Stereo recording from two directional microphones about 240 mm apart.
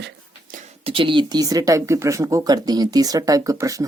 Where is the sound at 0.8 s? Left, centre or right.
Right.